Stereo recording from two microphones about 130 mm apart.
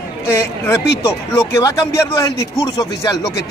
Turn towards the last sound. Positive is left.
turn(degrees=25)  # may be behind; listen again after turning